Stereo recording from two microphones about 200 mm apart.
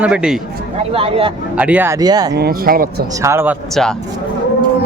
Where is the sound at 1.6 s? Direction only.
10° right (ahead or behind).